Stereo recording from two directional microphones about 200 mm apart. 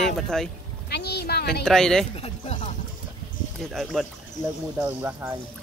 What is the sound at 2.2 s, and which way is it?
Music, 30° left (ahead or behind).